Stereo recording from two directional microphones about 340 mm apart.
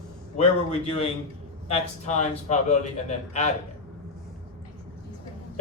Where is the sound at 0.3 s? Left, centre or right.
Centre.